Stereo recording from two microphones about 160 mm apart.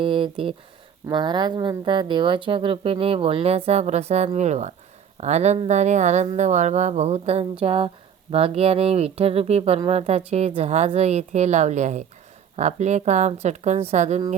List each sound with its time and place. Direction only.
0.0 s speech: 35° right (ahead or behind)